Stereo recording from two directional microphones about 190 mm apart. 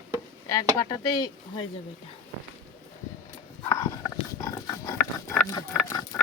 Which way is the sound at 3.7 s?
20° left (ahead or behind).